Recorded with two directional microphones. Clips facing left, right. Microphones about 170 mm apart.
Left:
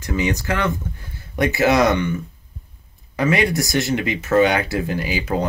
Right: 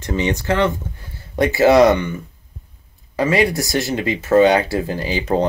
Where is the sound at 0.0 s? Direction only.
25° right (ahead or behind).